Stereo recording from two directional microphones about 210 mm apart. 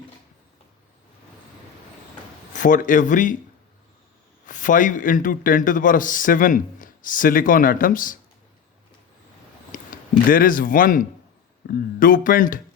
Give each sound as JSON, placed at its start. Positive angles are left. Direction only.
{"t": 2.5, "sound": "speech", "side_deg": 40}
{"t": 4.4, "sound": "speech", "side_deg": 40}
{"t": 9.7, "sound": "speech", "side_deg": 40}